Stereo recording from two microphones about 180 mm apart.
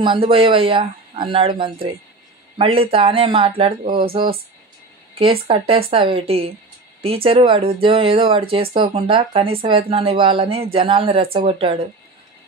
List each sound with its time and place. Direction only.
0.0 s speech: 30° right (ahead or behind)